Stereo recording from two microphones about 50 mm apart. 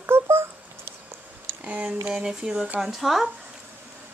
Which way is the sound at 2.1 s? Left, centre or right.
Centre.